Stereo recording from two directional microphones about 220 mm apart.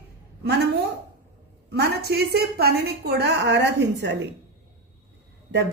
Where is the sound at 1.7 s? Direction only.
45° right (ahead or behind).